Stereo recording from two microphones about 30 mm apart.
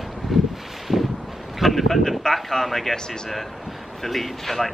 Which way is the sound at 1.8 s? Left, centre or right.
Centre.